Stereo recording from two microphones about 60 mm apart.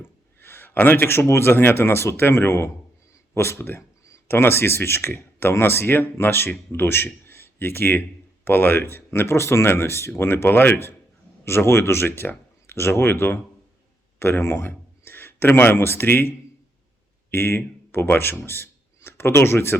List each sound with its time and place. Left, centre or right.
0.3 s a man's voice: left
17.3 s speech: left